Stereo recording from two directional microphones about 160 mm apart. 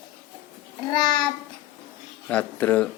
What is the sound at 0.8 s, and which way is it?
Child singing, 25° left (ahead or behind).